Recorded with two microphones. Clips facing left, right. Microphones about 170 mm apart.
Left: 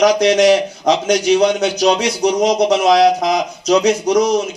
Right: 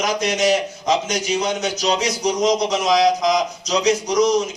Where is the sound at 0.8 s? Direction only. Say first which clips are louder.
Left 6 dB; 65° left (ahead or behind).